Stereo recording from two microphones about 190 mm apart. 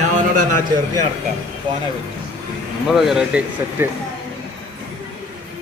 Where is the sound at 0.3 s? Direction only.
45° right (ahead or behind).